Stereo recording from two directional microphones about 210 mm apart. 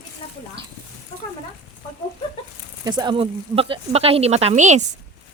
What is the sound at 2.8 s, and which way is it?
Speech, 20° right (ahead or behind).